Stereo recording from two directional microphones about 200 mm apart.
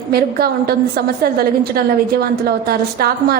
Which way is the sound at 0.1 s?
50° right (ahead or behind).